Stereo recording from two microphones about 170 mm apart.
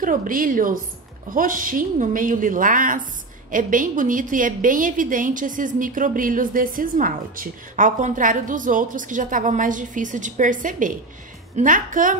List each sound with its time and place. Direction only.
0.0 s a woman's voice: 55° right (ahead or behind)